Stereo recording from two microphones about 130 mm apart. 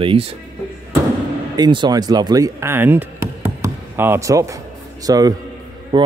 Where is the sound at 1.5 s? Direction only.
35° right (ahead or behind).